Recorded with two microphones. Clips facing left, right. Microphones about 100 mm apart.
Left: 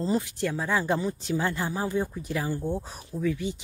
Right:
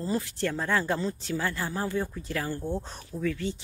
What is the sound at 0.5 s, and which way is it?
Speech, 10° left (ahead or behind).